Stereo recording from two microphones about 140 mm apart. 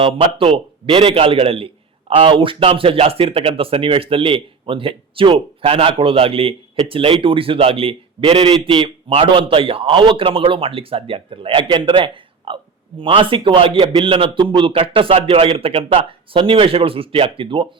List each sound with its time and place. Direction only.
0.0 s a man's voice: 40° right (ahead or behind)
9.1 s a man's voice: 40° right (ahead or behind)